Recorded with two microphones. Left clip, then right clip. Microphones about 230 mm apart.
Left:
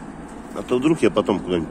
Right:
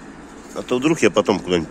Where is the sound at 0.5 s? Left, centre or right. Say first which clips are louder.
Right 1 dB; right.